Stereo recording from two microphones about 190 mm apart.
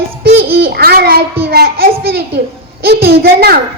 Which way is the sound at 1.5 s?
55° right (ahead or behind).